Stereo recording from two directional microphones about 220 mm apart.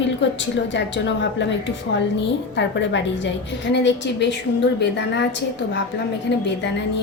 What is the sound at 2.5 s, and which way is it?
A woman's voice, 55° left (ahead or behind).